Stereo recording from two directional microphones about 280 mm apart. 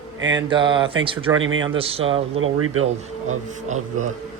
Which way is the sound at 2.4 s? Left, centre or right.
Right.